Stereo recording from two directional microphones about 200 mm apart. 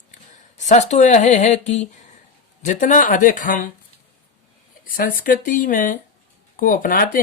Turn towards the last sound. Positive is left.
turn(degrees=45)  # may be behind; listen again after turning